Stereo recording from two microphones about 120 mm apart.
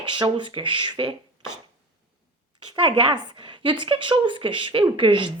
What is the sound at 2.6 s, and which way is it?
Speech, 40° right (ahead or behind).